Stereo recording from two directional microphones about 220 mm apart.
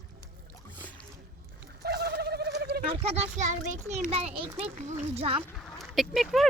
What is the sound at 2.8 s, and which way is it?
Speech, 30° right (ahead or behind).